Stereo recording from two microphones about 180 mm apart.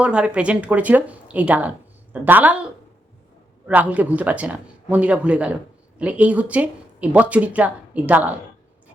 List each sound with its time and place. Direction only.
0.0 s speech: 5° right (ahead or behind)
3.7 s speech: 10° right (ahead or behind)